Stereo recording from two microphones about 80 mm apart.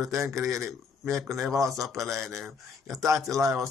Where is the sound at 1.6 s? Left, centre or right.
Centre.